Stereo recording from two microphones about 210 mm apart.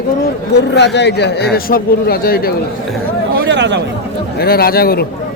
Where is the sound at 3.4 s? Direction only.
55° right (ahead or behind).